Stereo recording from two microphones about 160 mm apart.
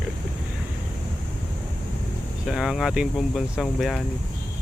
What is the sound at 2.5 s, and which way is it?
Speech, 5° right (ahead or behind).